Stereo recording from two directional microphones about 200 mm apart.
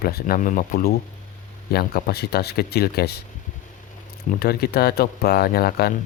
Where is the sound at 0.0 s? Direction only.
45° left (ahead or behind).